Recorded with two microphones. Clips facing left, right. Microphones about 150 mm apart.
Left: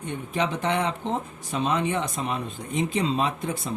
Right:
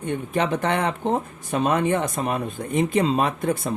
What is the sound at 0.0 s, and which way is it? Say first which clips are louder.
Speech: right 4 dB; 55° right (ahead or behind).